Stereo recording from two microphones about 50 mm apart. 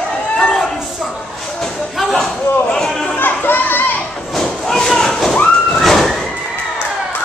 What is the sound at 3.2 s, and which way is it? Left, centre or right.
Children playing, left.